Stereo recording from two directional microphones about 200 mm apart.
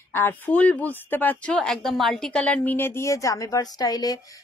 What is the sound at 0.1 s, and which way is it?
Speech, 10° left (ahead or behind).